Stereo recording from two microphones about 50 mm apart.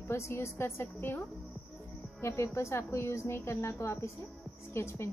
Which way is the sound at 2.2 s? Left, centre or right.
Left.